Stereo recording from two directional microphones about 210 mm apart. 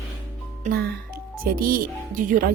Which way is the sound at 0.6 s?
50° right (ahead or behind).